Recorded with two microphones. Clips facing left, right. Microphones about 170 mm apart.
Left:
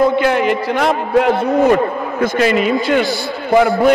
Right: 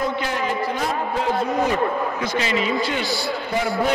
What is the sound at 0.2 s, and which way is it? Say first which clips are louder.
A man's voice: left 9 dB; 70° left (ahead or behind).